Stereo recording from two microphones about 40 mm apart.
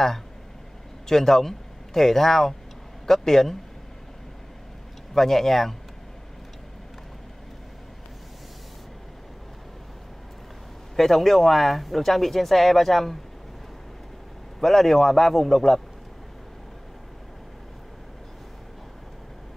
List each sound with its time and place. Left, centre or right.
1.0 s a man's voice: centre
5.1 s a man's voice: centre
11.0 s speech: centre
14.6 s a man's voice: centre